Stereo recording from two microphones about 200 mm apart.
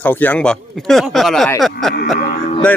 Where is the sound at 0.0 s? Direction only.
10° left (ahead or behind).